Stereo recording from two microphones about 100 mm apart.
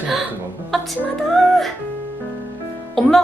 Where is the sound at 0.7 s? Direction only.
Centre (ahead or behind).